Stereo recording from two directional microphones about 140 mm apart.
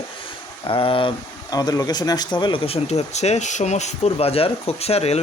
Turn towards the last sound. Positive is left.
turn(degrees=45)  # may be behind; listen again after turning